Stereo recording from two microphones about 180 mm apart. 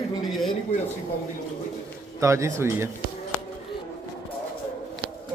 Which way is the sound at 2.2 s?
15° right (ahead or behind).